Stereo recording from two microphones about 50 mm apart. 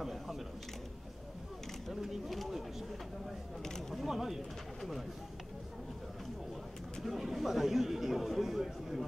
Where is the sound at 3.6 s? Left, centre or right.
Centre.